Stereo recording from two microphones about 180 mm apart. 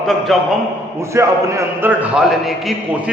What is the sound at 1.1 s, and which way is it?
A man's voice, 15° right (ahead or behind).